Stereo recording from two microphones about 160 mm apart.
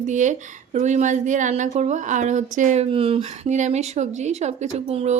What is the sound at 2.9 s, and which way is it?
Speech, 35° right (ahead or behind).